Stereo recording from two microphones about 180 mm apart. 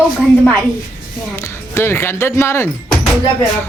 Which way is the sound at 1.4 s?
15° left (ahead or behind).